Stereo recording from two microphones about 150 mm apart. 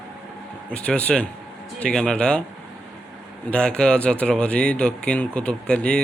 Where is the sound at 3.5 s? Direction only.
5° left (ahead or behind).